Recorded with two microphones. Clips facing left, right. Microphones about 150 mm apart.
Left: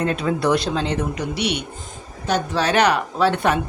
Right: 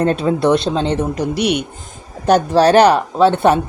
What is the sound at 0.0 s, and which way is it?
Speech, 30° right (ahead or behind).